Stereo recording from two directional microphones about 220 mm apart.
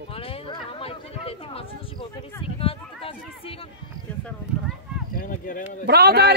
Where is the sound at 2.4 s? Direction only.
25° left (ahead or behind).